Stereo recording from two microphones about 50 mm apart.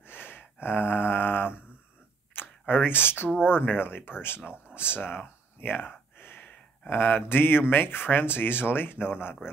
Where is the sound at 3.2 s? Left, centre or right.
Centre.